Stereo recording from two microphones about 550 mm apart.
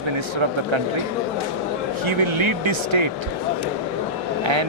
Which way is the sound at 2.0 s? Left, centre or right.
Right.